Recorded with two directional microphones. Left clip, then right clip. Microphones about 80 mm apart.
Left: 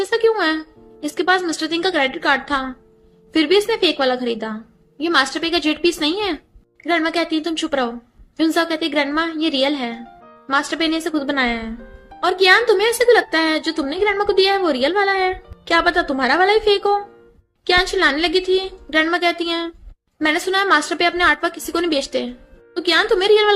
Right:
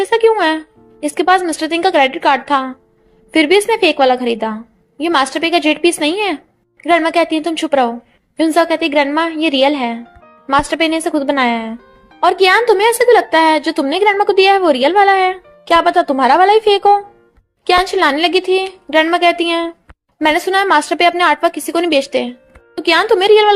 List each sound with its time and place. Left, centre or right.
0.0 s a woman's voice: right